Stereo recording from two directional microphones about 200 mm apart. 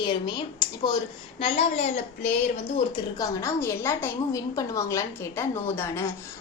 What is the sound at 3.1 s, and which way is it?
A woman's voice, 15° left (ahead or behind).